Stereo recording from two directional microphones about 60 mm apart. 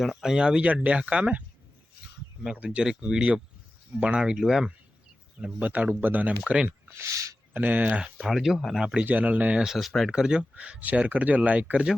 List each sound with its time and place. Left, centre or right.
0.0 s speech: centre; by 1.5 s right
2.6 s speech: centre
5.5 s speech: right
6.4 s speech: centre
7.0 s a sound: right
7.5 s speech: right
8.2 s speech: centre
8.8 s speech: centre
9.0 s speech: right
9.6 s speech: centre
10.1 s speech: centre